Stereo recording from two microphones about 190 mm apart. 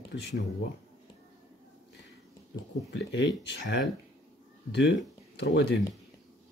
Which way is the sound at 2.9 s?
75° left (ahead or behind).